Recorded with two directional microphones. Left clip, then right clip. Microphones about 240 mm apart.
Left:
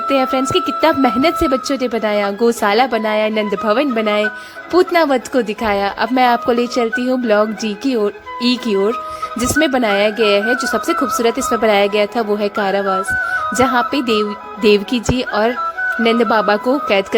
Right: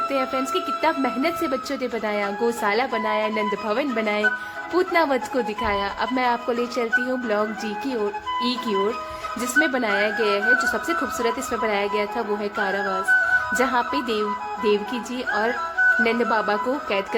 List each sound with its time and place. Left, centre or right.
0.1 s speech: left